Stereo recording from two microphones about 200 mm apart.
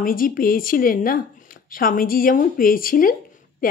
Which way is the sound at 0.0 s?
45° left (ahead or behind).